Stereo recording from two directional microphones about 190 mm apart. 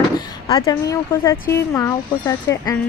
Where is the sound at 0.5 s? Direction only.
20° left (ahead or behind).